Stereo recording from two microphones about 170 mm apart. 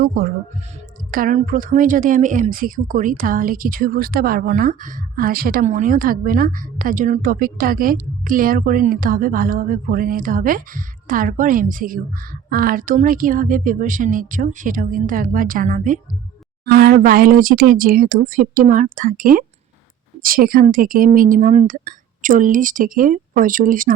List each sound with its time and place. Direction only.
0.0 s a woman's voice: 55° right (ahead or behind)
16.7 s a woman's voice: 60° right (ahead or behind)